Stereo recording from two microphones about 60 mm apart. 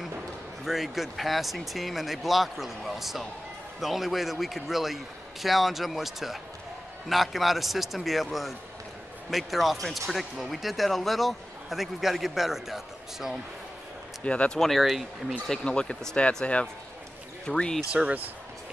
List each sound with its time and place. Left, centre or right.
0.7 s speech: centre
14.2 s speech: centre
14.6 s speech: centre